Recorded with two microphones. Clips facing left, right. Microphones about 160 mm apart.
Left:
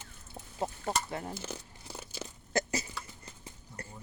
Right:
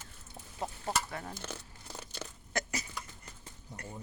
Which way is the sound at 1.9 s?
5° left (ahead or behind).